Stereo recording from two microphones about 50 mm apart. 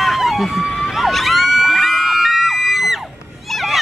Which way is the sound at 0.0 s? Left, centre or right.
Centre.